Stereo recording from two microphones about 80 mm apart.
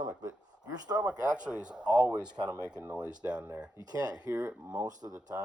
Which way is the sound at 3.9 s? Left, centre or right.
Right.